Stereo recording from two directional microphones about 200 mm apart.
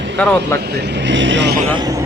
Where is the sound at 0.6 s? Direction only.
55° right (ahead or behind).